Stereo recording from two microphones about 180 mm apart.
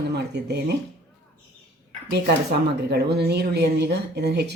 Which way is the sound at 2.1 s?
60° right (ahead or behind).